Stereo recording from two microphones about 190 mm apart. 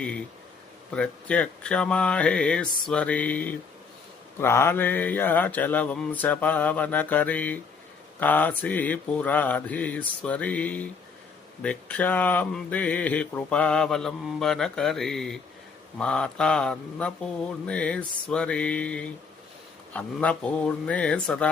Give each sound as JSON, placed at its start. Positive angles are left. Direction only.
{"t": 0.9, "sound": "speech", "side_deg": 5}